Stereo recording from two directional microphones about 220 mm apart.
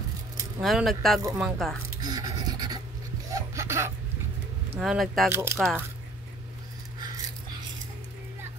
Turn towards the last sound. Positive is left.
turn(degrees=-20)  # may be behind; listen again after turning